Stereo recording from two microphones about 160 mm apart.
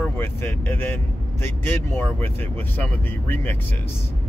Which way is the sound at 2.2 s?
10° left (ahead or behind).